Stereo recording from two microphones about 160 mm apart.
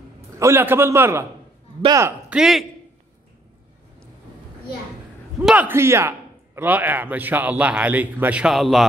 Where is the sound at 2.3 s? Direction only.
Centre (ahead or behind).